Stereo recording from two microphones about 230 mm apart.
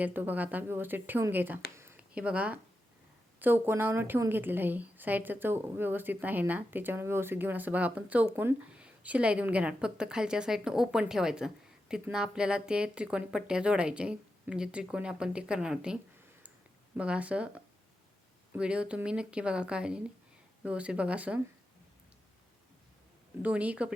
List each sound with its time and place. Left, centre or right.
0.0 s a woman's voice: centre
17.0 s a woman's voice: centre
23.4 s a woman's voice: centre